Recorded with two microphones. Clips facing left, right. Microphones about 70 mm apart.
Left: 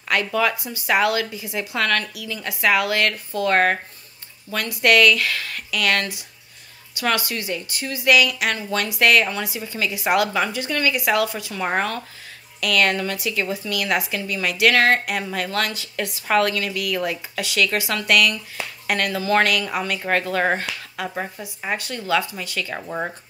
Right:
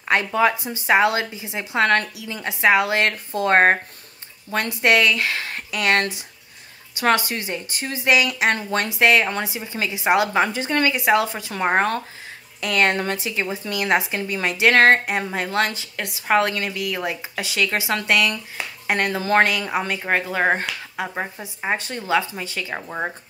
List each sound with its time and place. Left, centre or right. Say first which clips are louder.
0.1 s a woman's voice: right 2 dB; right
20.0 s a woman's voice: left 2 dB; centre